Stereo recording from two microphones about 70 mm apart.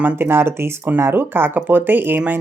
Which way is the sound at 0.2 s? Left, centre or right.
Right.